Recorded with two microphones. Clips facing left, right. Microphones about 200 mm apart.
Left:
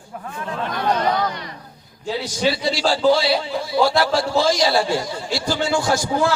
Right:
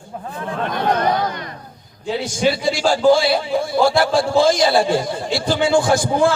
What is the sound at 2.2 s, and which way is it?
A man's voice, 50° right (ahead or behind).